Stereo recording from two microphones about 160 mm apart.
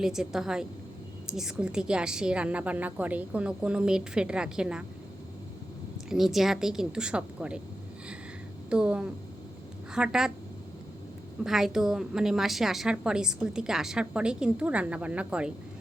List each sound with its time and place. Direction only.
0.0 s a woman's voice: 5° right (ahead or behind)
6.1 s a woman's voice: centre (ahead or behind)
8.7 s a woman's voice: 5° right (ahead or behind)
11.4 s a woman's voice: centre (ahead or behind)